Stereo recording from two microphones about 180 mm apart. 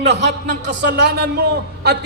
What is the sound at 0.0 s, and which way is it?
A man's voice, 75° right (ahead or behind).